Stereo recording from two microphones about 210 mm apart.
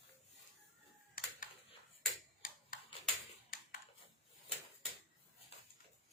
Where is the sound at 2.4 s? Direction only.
40° left (ahead or behind).